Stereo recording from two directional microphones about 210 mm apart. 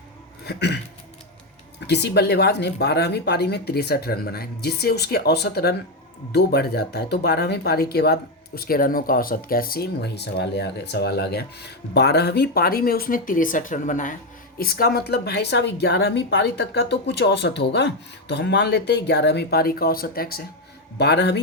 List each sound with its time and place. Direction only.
0.4 s speech: 50° left (ahead or behind)
1.9 s speech: 50° left (ahead or behind)